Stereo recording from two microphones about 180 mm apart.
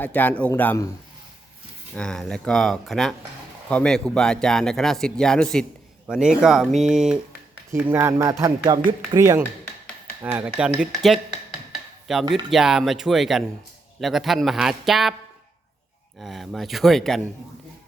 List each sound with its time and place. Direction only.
0.0 s speech: 10° left (ahead or behind)
2.0 s speech: 5° left (ahead or behind)
16.2 s speech: centre (ahead or behind)